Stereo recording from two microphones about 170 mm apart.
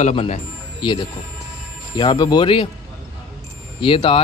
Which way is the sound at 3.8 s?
30° left (ahead or behind).